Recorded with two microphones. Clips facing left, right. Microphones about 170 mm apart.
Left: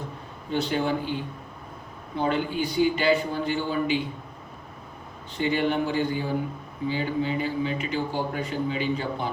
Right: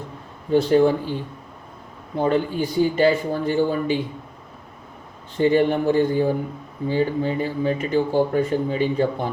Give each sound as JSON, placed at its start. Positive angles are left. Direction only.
{"t": 0.5, "sound": "speech", "side_deg": -45}
{"t": 5.4, "sound": "speech", "side_deg": -40}